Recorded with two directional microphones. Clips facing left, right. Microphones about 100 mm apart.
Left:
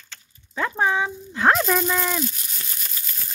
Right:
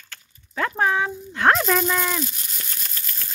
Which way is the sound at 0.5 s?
10° left (ahead or behind).